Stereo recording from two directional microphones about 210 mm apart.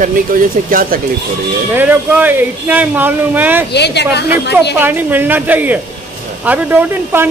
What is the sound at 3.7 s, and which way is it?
Speech, 55° left (ahead or behind).